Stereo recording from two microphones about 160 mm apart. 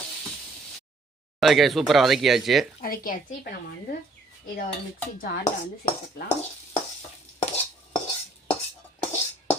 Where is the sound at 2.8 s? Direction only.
60° left (ahead or behind).